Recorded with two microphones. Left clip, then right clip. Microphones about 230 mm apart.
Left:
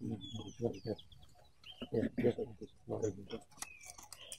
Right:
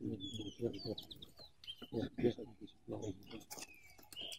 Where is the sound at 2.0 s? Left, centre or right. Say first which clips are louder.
Left 4 dB; left.